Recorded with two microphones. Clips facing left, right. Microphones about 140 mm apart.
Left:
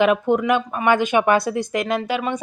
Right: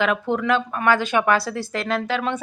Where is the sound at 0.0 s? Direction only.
20° left (ahead or behind).